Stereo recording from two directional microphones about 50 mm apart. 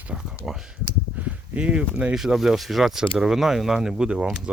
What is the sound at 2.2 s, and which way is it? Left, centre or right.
Speech, centre.